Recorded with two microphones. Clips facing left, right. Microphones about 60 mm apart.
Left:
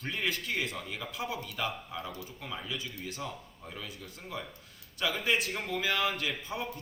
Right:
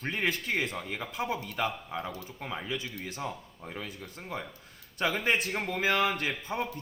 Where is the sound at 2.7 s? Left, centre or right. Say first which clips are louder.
Right 3 dB; right.